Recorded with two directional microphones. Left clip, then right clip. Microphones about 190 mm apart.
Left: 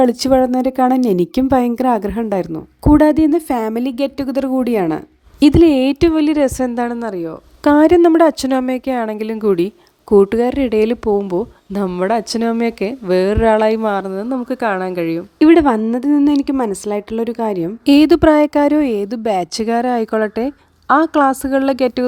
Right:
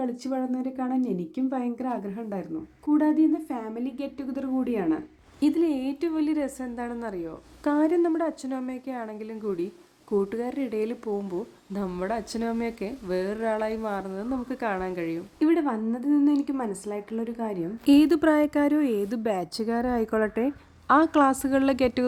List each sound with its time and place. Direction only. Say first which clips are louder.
0.0 s a woman's voice: left 18 dB; 60° left (ahead or behind)